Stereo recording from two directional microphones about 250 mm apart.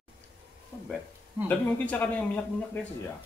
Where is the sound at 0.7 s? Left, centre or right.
Centre.